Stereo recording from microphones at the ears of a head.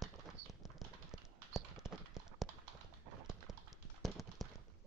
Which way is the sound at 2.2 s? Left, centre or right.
Right.